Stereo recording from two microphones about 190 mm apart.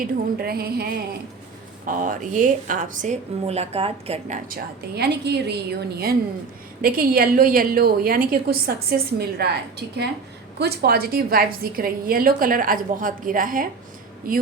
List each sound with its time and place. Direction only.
0.3 s a woman's voice: 55° right (ahead or behind)
1.9 s speech: 45° right (ahead or behind)
4.4 s a woman's voice: 55° right (ahead or behind)